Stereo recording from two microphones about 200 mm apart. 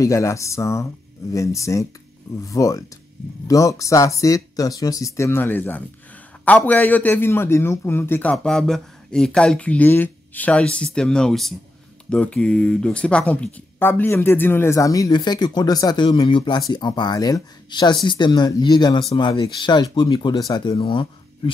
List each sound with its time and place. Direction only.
0.0 s a man's voice: 15° left (ahead or behind)